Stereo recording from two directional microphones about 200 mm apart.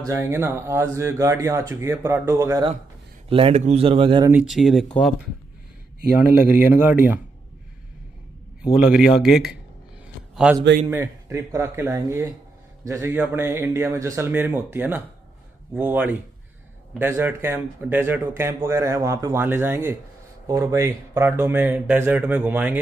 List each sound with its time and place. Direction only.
0.0 s speech: 15° right (ahead or behind)
3.3 s speech: 25° right (ahead or behind)
4.3 s speech: 5° right (ahead or behind)
6.5 s speech: 10° right (ahead or behind)
8.8 s a man's voice: centre (ahead or behind)